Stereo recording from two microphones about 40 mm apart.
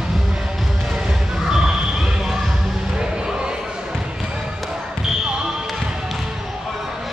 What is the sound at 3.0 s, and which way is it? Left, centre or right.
Crowd, centre.